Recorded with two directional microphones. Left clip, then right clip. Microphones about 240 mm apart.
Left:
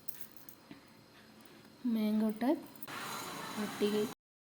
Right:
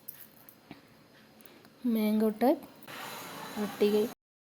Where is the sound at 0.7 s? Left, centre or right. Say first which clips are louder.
Right 4 dB; right.